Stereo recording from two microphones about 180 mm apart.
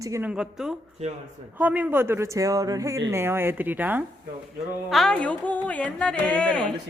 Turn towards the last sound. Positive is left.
turn(degrees=5)  # may be behind; listen again after turning